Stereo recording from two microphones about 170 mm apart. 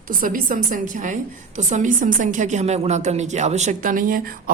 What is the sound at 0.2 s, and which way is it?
A woman's voice, 55° right (ahead or behind).